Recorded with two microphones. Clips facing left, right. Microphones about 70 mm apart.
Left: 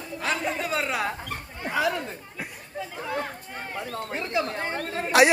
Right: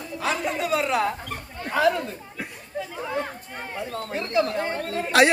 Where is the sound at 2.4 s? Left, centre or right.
Centre.